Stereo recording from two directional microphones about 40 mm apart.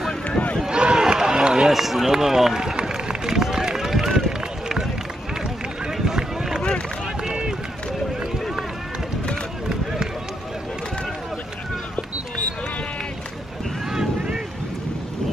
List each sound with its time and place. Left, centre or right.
0.7 s a sound: right
1.0 s run: centre
1.7 s run: centre
6.0 s run: centre